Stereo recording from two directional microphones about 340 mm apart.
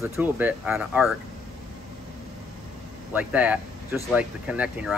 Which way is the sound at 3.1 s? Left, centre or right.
Centre.